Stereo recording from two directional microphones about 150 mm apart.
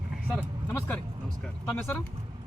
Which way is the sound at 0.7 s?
10° left (ahead or behind).